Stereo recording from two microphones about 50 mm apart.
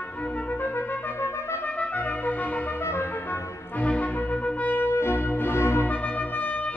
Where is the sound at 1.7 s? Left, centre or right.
Left.